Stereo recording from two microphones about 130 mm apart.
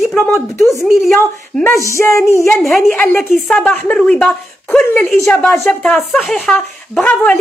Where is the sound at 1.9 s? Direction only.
20° left (ahead or behind).